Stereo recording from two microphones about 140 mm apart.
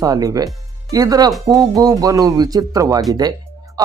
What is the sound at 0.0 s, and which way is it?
Speech, 25° right (ahead or behind).